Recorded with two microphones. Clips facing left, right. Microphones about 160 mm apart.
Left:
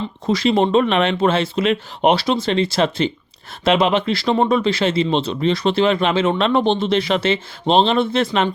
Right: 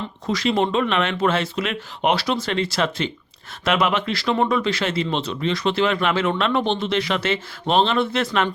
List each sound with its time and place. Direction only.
0.3 s speech: 30° left (ahead or behind)